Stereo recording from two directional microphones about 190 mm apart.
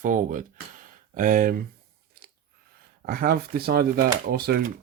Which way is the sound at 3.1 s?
50° right (ahead or behind).